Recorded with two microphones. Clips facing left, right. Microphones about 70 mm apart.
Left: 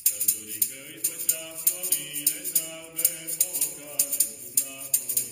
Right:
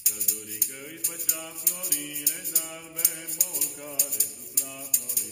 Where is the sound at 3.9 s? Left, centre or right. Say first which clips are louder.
Right 2 dB; centre.